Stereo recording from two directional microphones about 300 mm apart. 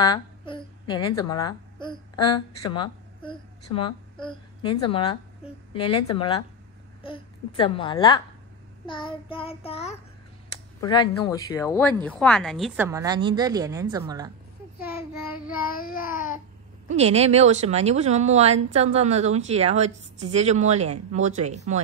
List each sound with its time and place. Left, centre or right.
0.0 s a woman's voice: centre
5.9 s speech: left
6.1 s speech: centre
8.8 s child singing: centre
10.8 s speech: centre
15.7 s child singing: left
16.8 s speech: right